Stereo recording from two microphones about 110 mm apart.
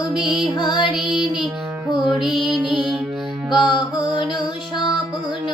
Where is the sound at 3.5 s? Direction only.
45° left (ahead or behind).